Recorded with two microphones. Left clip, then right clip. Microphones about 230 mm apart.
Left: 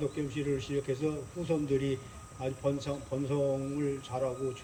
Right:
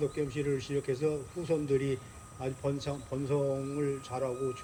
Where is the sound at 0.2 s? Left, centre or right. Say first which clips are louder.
Right 1 dB; centre.